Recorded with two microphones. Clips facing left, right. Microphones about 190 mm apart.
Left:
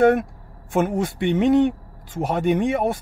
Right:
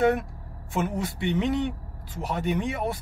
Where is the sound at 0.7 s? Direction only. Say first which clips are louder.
Left 7 dB; 50° left (ahead or behind).